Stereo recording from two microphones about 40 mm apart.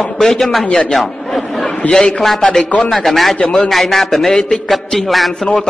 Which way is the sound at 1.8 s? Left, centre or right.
Left.